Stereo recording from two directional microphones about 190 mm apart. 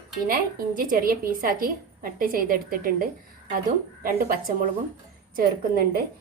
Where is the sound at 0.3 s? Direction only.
50° right (ahead or behind).